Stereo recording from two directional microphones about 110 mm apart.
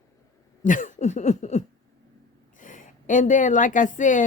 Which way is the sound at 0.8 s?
90° left.